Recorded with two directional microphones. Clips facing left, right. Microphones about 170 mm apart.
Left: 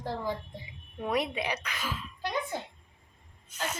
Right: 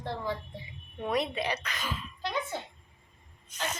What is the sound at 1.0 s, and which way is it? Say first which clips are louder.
A woman's voice: even; 10° left (ahead or behind).